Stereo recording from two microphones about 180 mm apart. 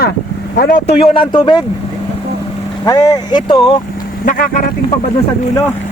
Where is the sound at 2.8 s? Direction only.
20° left (ahead or behind).